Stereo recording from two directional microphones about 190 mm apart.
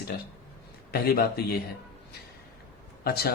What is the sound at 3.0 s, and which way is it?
Speech, 55° left (ahead or behind).